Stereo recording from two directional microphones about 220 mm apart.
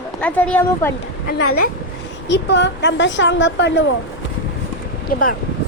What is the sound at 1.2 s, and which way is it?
A woman's voice, 45° left (ahead or behind).